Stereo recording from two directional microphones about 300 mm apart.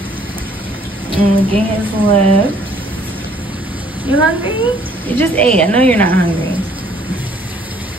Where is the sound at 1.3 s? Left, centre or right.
Centre.